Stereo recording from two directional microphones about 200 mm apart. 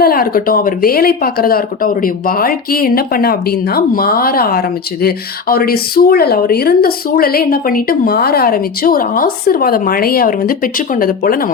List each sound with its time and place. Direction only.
0.0 s speech: 45° left (ahead or behind)